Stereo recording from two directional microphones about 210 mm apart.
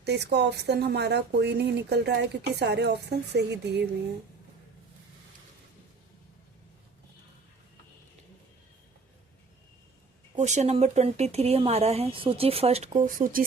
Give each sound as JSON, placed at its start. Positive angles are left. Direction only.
{"t": 0.0, "sound": "speech", "side_deg": -55}
{"t": 10.3, "sound": "speech", "side_deg": -35}